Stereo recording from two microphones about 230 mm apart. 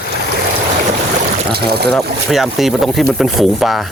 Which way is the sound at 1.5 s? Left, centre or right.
Right.